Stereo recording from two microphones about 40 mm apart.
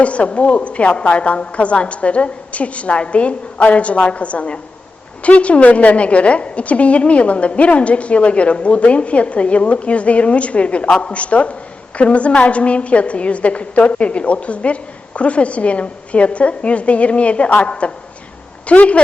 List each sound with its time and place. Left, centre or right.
0.0 s a woman's voice: left